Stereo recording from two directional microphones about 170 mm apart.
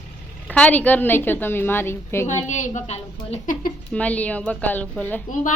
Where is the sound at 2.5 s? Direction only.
45° left (ahead or behind).